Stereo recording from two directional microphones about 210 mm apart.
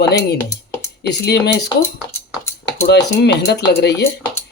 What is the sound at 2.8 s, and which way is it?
Speech, 55° left (ahead or behind).